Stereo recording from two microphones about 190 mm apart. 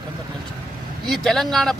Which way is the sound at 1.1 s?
Centre (ahead or behind).